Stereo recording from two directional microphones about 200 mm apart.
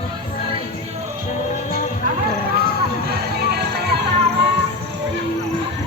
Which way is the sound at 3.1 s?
55° right (ahead or behind).